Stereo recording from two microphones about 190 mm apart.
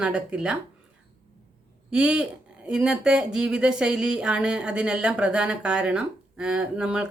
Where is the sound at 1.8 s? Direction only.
5° right (ahead or behind).